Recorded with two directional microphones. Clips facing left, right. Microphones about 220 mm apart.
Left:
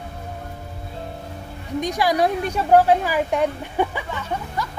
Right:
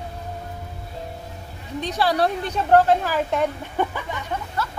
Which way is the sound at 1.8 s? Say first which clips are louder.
Left 1 dB; 15° left (ahead or behind).